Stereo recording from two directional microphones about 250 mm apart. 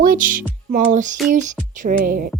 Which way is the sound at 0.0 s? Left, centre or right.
Right.